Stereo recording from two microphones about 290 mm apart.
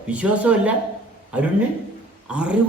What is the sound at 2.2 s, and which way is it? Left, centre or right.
Speech, centre.